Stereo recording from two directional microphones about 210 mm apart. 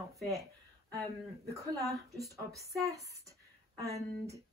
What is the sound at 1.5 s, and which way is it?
Speech, 15° right (ahead or behind).